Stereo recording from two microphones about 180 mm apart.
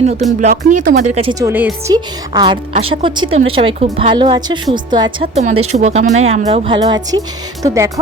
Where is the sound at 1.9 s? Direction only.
25° right (ahead or behind).